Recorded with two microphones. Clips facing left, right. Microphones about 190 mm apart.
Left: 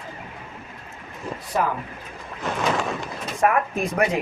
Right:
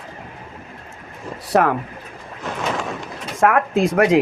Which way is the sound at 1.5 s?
75° right (ahead or behind).